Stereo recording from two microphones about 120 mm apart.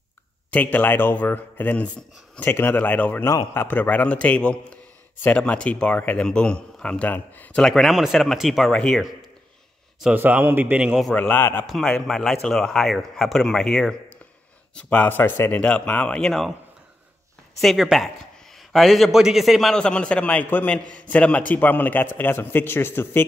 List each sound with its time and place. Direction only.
0.5 s a man's voice: 15° left (ahead or behind)
7.6 s a man's voice: centre (ahead or behind)
10.1 s a man's voice: 15° right (ahead or behind)
11.1 s a man's voice: 15° left (ahead or behind)
11.6 s a man's voice: 5° left (ahead or behind)
17.6 s a man's voice: centre (ahead or behind); by 23.2 s 20° left (ahead or behind)